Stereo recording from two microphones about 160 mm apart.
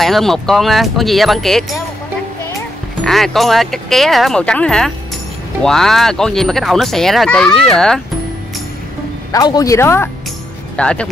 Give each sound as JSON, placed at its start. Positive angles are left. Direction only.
{"t": 0.0, "sound": "speech", "side_deg": 0}
{"t": 3.0, "sound": "speech", "side_deg": 0}
{"t": 9.3, "sound": "speech", "side_deg": 25}